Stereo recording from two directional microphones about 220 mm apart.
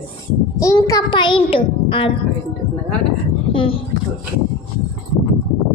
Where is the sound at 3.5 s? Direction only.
25° left (ahead or behind).